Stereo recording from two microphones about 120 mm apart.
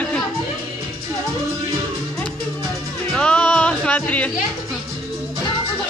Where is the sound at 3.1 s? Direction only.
10° left (ahead or behind).